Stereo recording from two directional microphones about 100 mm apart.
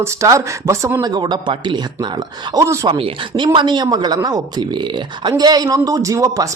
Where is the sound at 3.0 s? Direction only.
55° right (ahead or behind).